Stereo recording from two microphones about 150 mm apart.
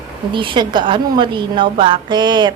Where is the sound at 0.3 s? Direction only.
35° right (ahead or behind).